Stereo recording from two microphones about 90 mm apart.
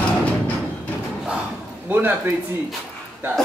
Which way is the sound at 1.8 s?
20° right (ahead or behind).